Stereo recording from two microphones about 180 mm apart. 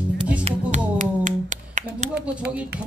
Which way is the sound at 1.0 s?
45° right (ahead or behind).